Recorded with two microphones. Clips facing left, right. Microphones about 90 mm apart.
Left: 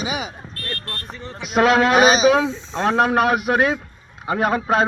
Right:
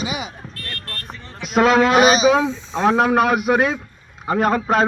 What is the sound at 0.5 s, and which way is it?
Music, 35° left (ahead or behind).